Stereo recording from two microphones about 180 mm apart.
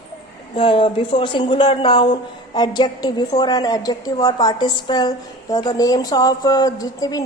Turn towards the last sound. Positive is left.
turn(degrees=20)  # may be behind; listen again after turning